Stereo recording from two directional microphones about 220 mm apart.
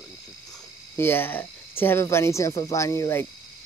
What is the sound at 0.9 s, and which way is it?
Speech, 10° left (ahead or behind).